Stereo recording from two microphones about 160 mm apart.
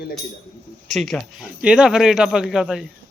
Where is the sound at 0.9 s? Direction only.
Centre (ahead or behind).